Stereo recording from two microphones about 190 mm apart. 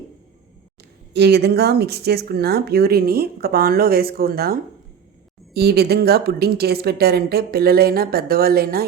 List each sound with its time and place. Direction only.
1.1 s speech: 60° right (ahead or behind)
5.5 s speech: 55° right (ahead or behind)